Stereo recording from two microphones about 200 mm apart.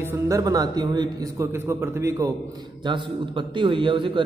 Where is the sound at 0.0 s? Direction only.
15° right (ahead or behind).